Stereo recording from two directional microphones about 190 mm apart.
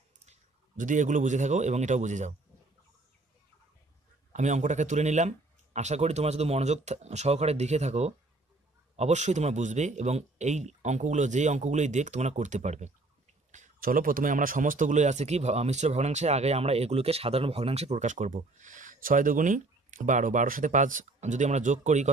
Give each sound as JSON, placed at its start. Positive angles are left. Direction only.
{"t": 0.2, "sound": "speech", "side_deg": -40}
{"t": 4.3, "sound": "speech", "side_deg": -40}